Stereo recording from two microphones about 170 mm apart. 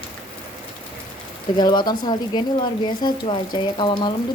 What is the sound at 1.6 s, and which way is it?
Speech, 25° left (ahead or behind).